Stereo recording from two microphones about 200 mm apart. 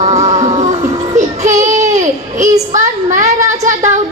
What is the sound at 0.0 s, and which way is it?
Music, 35° right (ahead or behind).